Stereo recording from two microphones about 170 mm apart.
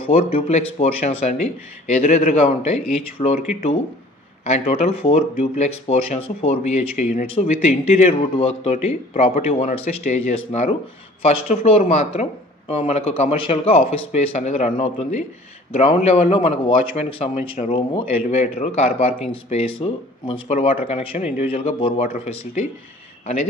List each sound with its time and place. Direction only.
0.0 s speech: 35° left (ahead or behind)
4.5 s speech: 35° left (ahead or behind)